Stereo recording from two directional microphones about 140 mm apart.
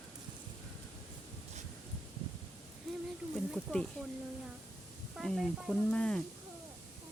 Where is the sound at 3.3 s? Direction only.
Centre (ahead or behind).